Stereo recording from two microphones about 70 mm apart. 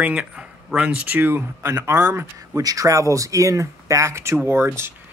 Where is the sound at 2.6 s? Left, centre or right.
Right.